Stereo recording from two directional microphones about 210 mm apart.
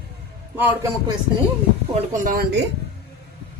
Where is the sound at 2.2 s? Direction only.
45° right (ahead or behind).